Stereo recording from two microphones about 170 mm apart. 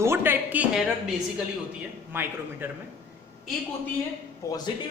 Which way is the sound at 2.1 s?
15° right (ahead or behind).